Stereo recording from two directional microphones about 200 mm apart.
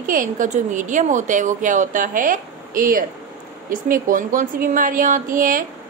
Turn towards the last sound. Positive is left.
turn(degrees=-40)  # may be behind; listen again after turning